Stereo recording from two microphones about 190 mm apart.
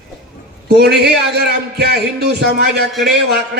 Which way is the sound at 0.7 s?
60° right (ahead or behind).